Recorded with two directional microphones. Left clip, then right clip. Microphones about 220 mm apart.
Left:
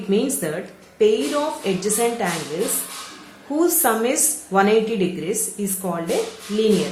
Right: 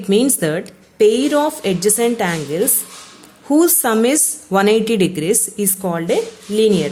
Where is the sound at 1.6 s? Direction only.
45° right (ahead or behind).